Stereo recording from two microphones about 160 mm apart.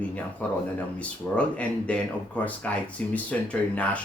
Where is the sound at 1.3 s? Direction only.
5° left (ahead or behind).